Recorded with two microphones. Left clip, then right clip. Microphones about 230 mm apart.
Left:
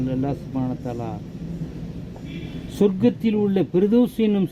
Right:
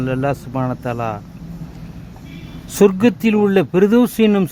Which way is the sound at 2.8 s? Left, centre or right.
Right.